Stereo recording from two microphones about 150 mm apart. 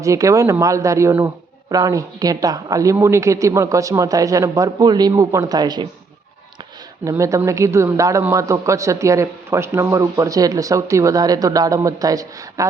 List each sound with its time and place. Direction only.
0.0 s speech: 20° right (ahead or behind)
7.0 s speech: 20° right (ahead or behind)